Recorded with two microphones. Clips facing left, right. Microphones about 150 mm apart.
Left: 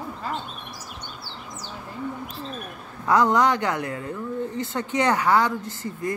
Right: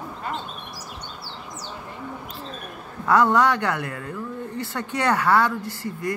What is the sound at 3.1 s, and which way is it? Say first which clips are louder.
Speech: right 1 dB; 15° left (ahead or behind).